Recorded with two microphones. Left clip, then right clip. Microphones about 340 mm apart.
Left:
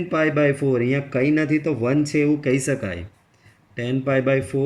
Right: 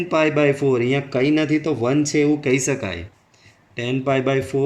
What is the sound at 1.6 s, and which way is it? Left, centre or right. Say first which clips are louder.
Speech: right 1 dB; right.